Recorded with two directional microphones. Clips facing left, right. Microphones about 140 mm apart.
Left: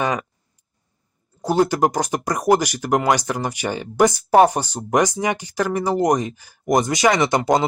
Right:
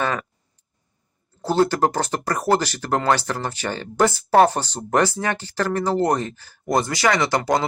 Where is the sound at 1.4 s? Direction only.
15° left (ahead or behind).